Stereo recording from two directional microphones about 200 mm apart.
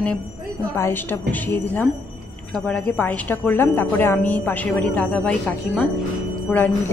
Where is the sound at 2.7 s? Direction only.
10° left (ahead or behind).